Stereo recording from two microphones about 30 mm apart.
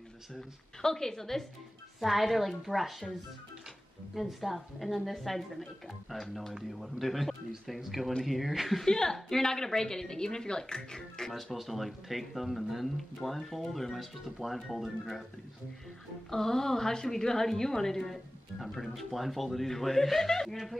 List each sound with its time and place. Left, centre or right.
0.8 s a woman's voice: centre
2.0 s speech: centre
4.1 s speech: centre
8.8 s a woman's voice: left
11.6 s speech: centre
16.3 s a woman's voice: centre